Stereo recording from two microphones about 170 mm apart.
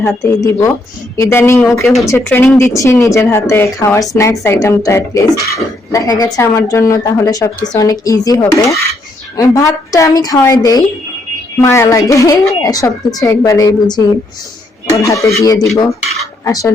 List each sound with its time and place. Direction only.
0.2 s speech: 20° left (ahead or behind)